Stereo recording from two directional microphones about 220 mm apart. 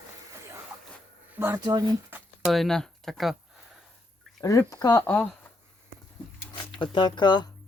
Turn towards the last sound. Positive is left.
turn(degrees=20)  # may be behind; listen again after turning